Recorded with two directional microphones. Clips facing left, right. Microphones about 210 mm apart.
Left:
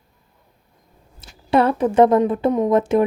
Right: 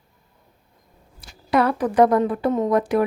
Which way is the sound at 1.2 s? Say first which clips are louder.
Left 3 dB; 25° left (ahead or behind).